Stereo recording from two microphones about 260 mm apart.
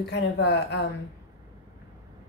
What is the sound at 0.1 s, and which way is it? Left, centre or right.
Speech, left.